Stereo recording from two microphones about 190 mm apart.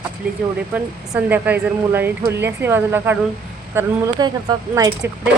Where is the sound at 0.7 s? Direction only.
10° right (ahead or behind).